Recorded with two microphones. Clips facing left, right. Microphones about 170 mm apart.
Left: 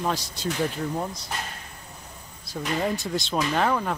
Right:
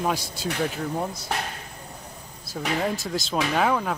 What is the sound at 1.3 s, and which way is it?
Speech, 75° right (ahead or behind).